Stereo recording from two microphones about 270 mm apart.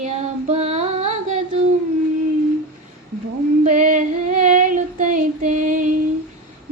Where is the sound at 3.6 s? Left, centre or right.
Right.